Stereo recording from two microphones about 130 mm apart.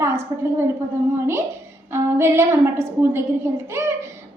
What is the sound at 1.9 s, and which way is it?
A woman's voice, 20° right (ahead or behind).